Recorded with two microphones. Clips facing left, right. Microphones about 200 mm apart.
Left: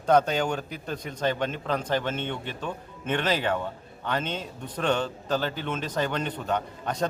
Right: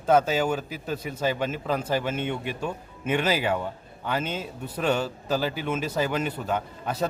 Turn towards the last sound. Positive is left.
turn(degrees=-5)  # may be behind; listen again after turning